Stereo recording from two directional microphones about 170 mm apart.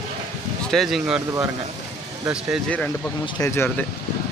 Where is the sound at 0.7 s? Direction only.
Centre (ahead or behind).